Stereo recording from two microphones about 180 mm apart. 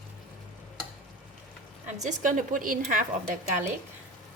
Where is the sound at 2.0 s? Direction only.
45° right (ahead or behind).